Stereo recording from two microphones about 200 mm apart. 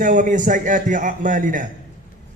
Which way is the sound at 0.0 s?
40° right (ahead or behind).